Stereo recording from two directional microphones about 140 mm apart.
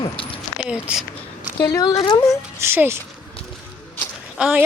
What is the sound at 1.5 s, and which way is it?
Speech, 25° left (ahead or behind).